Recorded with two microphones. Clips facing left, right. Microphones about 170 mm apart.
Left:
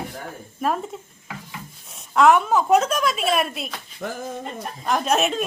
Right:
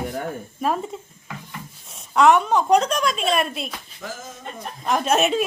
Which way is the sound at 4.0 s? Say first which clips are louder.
Left 7 dB; 60° left (ahead or behind).